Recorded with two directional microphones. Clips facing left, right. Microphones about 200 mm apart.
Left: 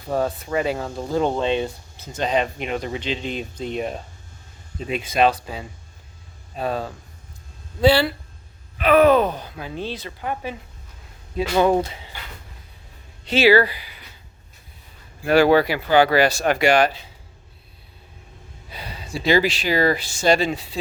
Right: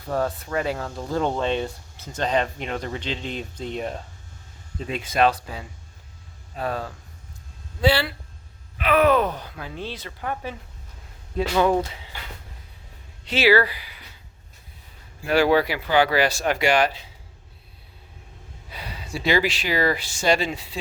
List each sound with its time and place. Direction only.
0.1 s speech: 20° left (ahead or behind)
7.8 s groan: 35° left (ahead or behind)
9.6 s speech: 15° left (ahead or behind)
13.3 s speech: 20° left (ahead or behind)
15.3 s speech: 55° left (ahead or behind)
18.7 s speech: 30° left (ahead or behind)